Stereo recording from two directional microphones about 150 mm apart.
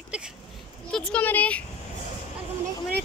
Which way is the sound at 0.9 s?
10° left (ahead or behind).